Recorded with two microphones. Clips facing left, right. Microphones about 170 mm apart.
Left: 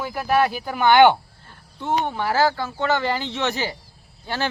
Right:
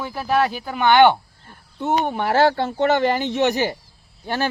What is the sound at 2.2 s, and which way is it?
Speech, 60° right (ahead or behind).